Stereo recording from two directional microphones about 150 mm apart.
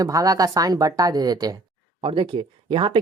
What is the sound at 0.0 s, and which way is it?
A woman's voice, 25° right (ahead or behind).